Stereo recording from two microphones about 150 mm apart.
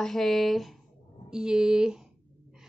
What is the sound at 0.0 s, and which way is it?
Speech, centre (ahead or behind).